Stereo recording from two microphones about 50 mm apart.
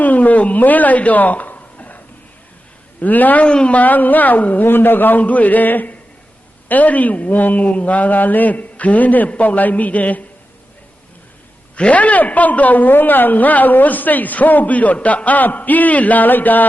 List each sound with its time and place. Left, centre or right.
0.0 s a sound: left
3.0 s a woman's voice: left
3.4 s speech: centre
3.8 s a woman's voice: left
4.6 s a woman's voice: left
11.8 s a woman's voice: left